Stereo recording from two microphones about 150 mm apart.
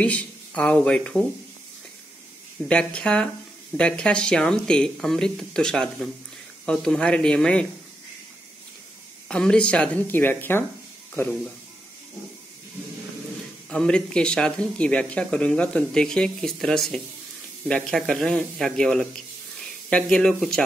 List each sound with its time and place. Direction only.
0.0 s speech: 10° left (ahead or behind)
2.7 s speech: 5° left (ahead or behind)
9.3 s speech: 5° left (ahead or behind)
13.7 s speech: 5° left (ahead or behind)